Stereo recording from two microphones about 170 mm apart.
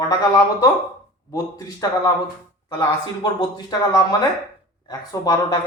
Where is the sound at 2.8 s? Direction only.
25° left (ahead or behind).